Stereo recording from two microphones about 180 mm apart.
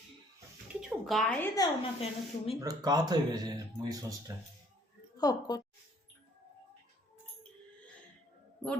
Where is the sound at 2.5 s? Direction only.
20° right (ahead or behind).